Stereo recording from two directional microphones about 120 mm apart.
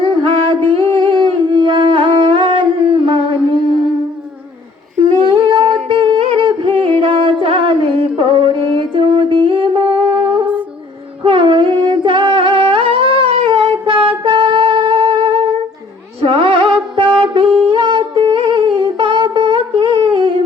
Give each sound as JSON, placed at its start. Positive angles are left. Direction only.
{"t": 0.1, "sound": "music", "side_deg": -45}
{"t": 0.9, "sound": "humming", "side_deg": -40}
{"t": 5.2, "sound": "humming", "side_deg": -45}
{"t": 5.9, "sound": "music", "side_deg": -45}
{"t": 11.2, "sound": "singing", "side_deg": -45}
{"t": 14.3, "sound": "music", "side_deg": -40}
{"t": 17.7, "sound": "humming", "side_deg": -45}